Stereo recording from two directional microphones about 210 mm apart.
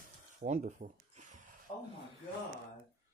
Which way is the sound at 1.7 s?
30° left (ahead or behind).